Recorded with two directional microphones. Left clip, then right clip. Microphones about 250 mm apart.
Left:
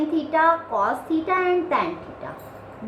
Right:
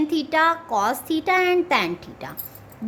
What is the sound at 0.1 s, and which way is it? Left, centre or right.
A woman's voice, right.